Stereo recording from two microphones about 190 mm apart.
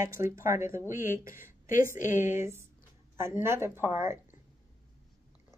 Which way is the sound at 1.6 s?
45° left (ahead or behind).